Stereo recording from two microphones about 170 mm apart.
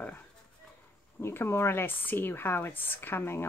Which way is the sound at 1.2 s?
15° left (ahead or behind).